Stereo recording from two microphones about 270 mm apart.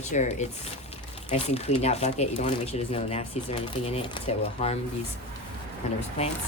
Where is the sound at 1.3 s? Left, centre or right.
Left.